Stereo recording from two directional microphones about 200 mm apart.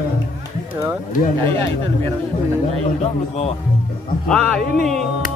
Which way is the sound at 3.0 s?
30° left (ahead or behind).